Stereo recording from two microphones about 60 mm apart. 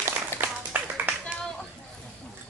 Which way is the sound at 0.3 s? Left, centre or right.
Left.